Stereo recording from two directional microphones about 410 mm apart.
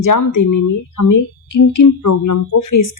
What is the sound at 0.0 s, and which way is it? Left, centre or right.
Speech, left.